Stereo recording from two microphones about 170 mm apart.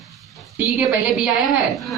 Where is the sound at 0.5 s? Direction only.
5° right (ahead or behind).